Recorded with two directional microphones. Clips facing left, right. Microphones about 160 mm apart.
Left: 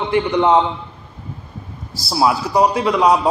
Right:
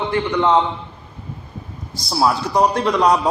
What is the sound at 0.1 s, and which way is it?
Speech, 15° left (ahead or behind).